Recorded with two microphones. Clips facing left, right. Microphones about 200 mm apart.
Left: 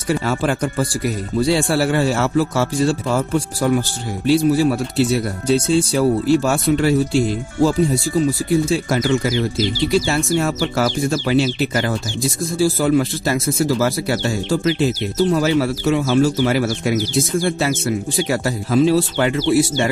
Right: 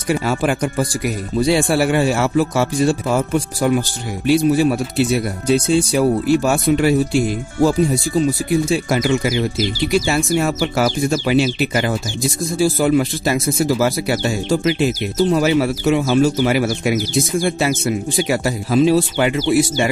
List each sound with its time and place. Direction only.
0.1 s speech: 15° right (ahead or behind)